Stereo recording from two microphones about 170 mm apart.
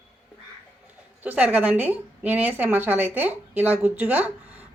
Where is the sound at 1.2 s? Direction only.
10° right (ahead or behind).